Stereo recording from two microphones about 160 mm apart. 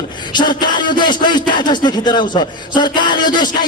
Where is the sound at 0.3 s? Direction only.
30° left (ahead or behind).